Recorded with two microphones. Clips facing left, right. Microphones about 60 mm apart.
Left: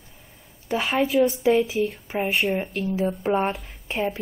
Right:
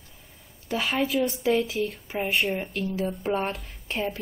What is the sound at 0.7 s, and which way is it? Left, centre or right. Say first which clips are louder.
A woman's voice: left 4 dB; centre.